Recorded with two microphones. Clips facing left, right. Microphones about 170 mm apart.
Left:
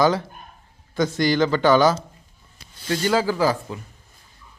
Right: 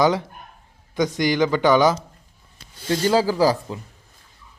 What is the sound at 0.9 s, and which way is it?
Speech, 15° right (ahead or behind).